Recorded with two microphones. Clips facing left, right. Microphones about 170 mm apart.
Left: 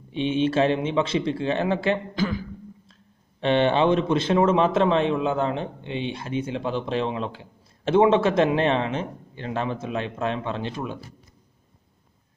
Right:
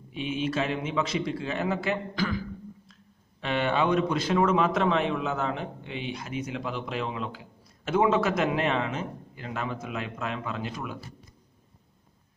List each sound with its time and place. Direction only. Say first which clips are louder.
0.1 s speech: left 7 dB; 30° left (ahead or behind)